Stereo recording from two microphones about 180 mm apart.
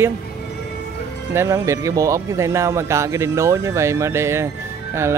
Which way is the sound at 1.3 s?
15° right (ahead or behind).